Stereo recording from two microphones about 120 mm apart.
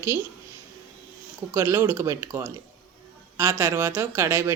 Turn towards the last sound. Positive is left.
turn(degrees=-20)  # may be behind; listen again after turning